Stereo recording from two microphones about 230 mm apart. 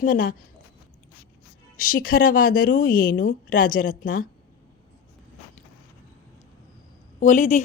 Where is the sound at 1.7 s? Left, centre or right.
Left.